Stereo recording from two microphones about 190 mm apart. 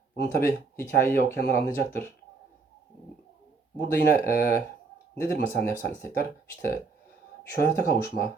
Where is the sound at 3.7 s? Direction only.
60° left (ahead or behind).